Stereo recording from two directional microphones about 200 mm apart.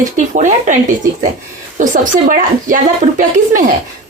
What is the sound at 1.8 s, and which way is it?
Speech, 40° right (ahead or behind).